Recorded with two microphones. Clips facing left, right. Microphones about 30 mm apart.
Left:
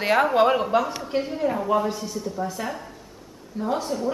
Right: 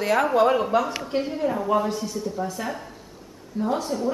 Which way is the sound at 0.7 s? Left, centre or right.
Centre.